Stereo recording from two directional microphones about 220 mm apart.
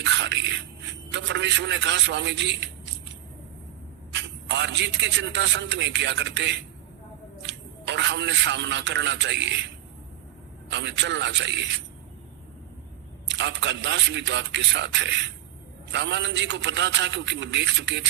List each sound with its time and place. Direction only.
0.0 s a sound: 55° right (ahead or behind)
1.1 s a man's voice: 55° right (ahead or behind)
4.1 s a man's voice: 55° right (ahead or behind)
10.7 s a man's voice: 55° right (ahead or behind)
13.2 s a man's voice: 55° right (ahead or behind)